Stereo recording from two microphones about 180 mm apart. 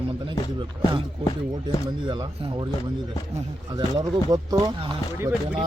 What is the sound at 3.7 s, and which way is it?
Speech, 25° right (ahead or behind).